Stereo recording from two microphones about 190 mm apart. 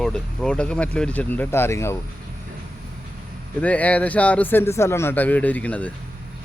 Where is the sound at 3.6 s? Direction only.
5° left (ahead or behind).